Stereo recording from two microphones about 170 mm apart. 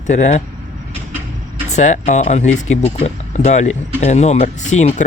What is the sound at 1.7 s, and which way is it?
Speech, 45° left (ahead or behind).